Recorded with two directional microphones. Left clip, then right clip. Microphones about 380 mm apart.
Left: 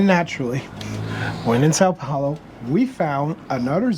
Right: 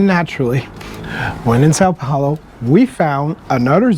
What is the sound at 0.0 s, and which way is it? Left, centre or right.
Speech, right.